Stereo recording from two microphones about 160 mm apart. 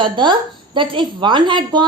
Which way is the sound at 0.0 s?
30° right (ahead or behind).